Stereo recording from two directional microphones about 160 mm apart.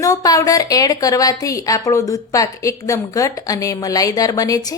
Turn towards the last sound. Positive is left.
turn(degrees=20)  # may be behind; listen again after turning